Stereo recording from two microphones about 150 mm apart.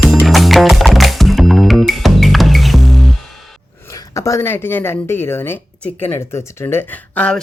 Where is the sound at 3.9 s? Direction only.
20° left (ahead or behind).